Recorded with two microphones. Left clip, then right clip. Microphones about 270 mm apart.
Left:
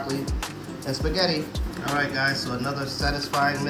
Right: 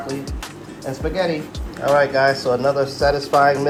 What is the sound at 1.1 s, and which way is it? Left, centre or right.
Speech, centre.